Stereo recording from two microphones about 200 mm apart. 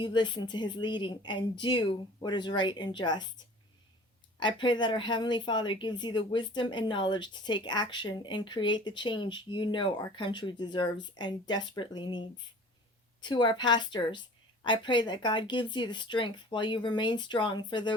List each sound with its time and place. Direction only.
0.0 s a woman's voice: 25° left (ahead or behind)